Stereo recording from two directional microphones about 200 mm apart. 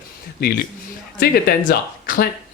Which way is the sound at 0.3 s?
50° left (ahead or behind).